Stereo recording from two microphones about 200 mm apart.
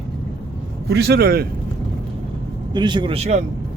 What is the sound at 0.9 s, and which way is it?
Speech, 55° right (ahead or behind).